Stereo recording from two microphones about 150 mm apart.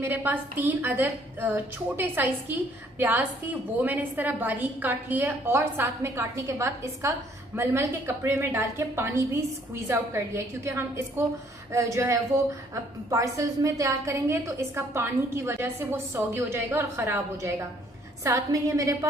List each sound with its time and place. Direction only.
0.0 s a woman's voice: 15° right (ahead or behind)